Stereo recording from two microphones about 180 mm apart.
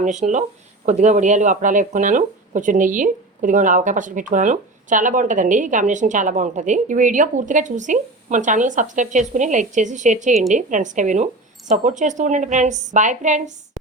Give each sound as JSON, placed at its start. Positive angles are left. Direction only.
{"t": 0.0, "sound": "speech", "side_deg": -40}